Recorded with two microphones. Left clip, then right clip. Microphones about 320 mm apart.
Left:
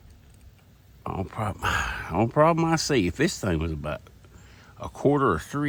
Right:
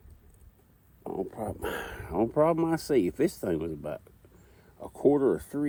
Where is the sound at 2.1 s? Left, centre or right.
Left.